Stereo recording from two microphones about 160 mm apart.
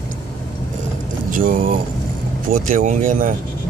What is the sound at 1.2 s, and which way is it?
Speech, 60° right (ahead or behind).